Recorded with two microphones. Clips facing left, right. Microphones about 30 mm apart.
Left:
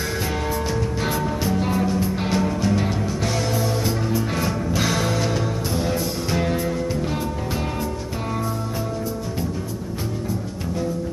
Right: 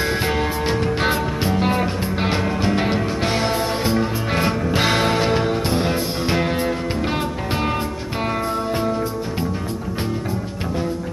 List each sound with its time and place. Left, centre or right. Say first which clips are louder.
0.0 s music: right 5 dB; right